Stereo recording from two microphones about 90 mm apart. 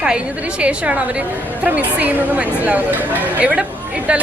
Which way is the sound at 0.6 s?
15° right (ahead or behind).